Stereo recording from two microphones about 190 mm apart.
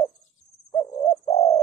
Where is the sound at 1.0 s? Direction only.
35° left (ahead or behind).